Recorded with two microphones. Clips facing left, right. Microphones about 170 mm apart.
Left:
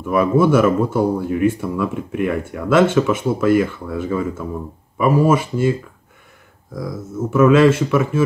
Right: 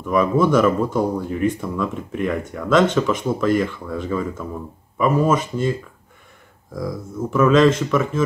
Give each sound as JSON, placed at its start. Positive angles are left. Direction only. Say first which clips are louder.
{"t": 0.0, "sound": "speech", "louder": "left 2 dB", "side_deg": 5}